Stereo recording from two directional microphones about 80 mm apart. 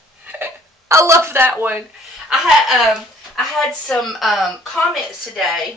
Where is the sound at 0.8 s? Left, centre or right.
Right.